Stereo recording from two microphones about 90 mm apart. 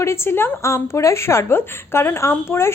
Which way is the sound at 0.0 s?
30° left (ahead or behind).